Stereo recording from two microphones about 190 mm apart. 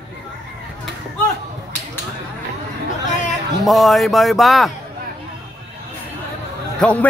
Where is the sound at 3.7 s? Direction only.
Centre (ahead or behind).